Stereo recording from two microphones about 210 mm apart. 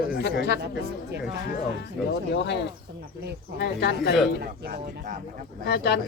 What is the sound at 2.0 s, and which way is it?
Speech, centre (ahead or behind).